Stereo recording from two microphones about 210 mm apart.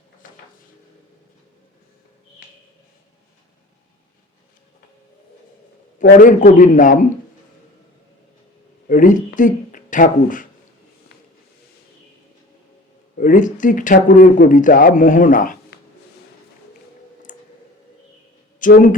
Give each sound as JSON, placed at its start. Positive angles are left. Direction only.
{"t": 6.0, "sound": "speech", "side_deg": 40}
{"t": 8.9, "sound": "a sound", "side_deg": 40}
{"t": 13.1, "sound": "speech", "side_deg": 40}
{"t": 17.3, "sound": "clicking", "side_deg": 40}
{"t": 18.6, "sound": "speech", "side_deg": 40}